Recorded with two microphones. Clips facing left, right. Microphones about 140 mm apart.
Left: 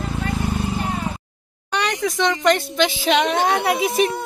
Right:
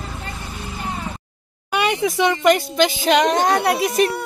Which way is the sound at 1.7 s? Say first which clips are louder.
Right 3 dB; 10° right (ahead or behind).